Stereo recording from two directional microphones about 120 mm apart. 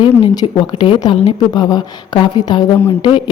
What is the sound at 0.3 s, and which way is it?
A woman's voice, 40° left (ahead or behind).